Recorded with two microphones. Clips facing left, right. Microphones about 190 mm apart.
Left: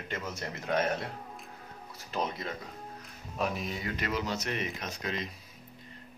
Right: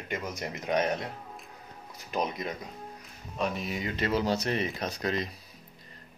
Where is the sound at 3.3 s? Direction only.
Centre (ahead or behind).